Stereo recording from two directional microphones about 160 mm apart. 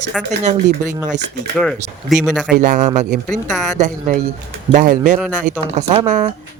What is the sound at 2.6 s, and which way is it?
Speech, 55° right (ahead or behind).